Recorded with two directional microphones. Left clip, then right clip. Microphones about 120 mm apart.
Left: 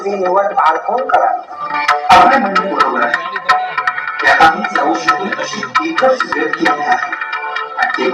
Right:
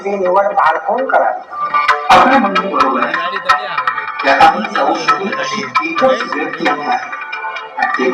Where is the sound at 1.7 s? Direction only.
35° left (ahead or behind).